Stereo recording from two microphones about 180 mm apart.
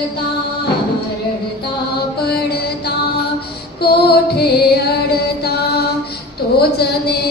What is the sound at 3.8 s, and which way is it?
Music, 60° left (ahead or behind).